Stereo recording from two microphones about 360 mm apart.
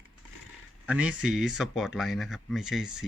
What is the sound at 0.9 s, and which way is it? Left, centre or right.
Speech, centre.